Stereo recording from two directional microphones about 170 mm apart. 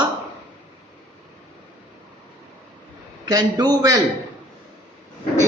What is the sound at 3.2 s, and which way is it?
Speech, 25° right (ahead or behind).